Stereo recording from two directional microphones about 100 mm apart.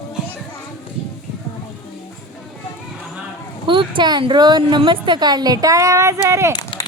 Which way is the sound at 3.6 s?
55° right (ahead or behind).